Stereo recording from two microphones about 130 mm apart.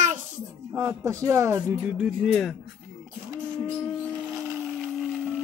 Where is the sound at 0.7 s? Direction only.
25° right (ahead or behind).